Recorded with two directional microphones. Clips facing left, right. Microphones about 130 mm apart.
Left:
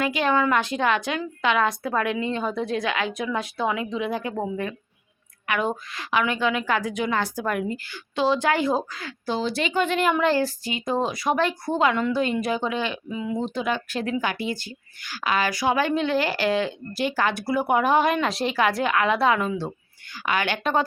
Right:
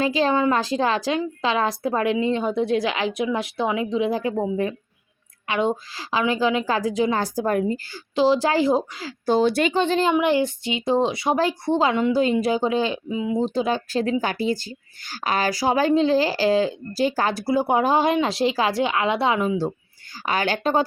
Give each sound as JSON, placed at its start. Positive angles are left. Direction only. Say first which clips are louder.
{"t": 0.0, "sound": "a woman's voice", "louder": "right 2 dB", "side_deg": -30}
{"t": 5.5, "sound": "a woman's voice", "louder": "right 3 dB", "side_deg": -25}
{"t": 9.2, "sound": "speech", "louder": "right 7 dB", "side_deg": -50}
{"t": 9.7, "sound": "a woman's voice", "louder": "right 2 dB", "side_deg": -30}
{"t": 10.2, "sound": "a woman's voice", "louder": "right 2 dB", "side_deg": -20}
{"t": 13.4, "sound": "a woman's voice", "louder": "right 4 dB", "side_deg": -30}
{"t": 19.4, "sound": "speech", "louder": "right 4 dB", "side_deg": -10}
{"t": 20.2, "sound": "a woman's voice", "louder": "right 2 dB", "side_deg": -40}